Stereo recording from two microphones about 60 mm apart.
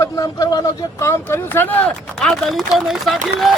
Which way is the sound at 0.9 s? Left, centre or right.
Left.